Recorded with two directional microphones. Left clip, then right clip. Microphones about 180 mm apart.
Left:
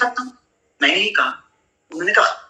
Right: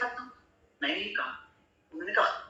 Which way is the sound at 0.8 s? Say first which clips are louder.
Left 15 dB; 55° left (ahead or behind).